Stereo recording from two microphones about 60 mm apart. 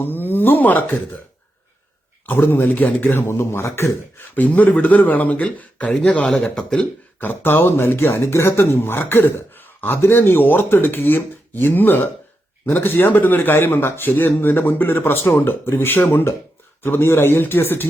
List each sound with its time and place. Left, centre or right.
0.0 s speech: left
2.2 s speech: left
4.4 s speech: left
6.2 s speech: centre
7.2 s speech: left